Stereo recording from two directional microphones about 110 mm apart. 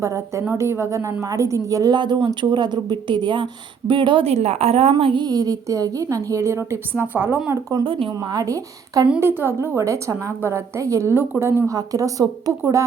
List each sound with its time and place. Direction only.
0.0 s a woman's voice: 30° right (ahead or behind); by 4.3 s 50° right (ahead or behind)
4.3 s a woman's voice: 75° right (ahead or behind); by 5.2 s 55° right (ahead or behind)
5.2 s a woman's voice: 35° right (ahead or behind); by 7.5 s 15° right (ahead or behind)
7.9 s speech: 55° right (ahead or behind)
8.1 s a woman's voice: 35° right (ahead or behind)
9.2 s a woman's voice: 20° right (ahead or behind)
11.6 s a woman's voice: 30° right (ahead or behind)